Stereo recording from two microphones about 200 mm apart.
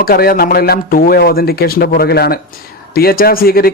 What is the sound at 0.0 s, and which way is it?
Speech, 50° left (ahead or behind).